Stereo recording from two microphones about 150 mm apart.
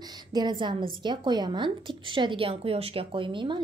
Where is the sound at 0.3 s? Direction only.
30° right (ahead or behind).